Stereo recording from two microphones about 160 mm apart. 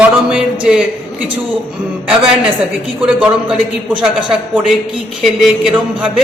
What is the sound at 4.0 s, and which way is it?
A woman's voice, 5° right (ahead or behind).